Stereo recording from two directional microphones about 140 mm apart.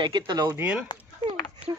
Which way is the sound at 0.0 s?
30° right (ahead or behind).